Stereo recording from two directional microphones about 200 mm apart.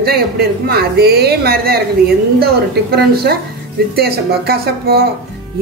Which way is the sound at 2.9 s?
50° right (ahead or behind).